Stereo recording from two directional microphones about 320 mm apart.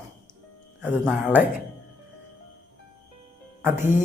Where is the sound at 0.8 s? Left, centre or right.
Centre.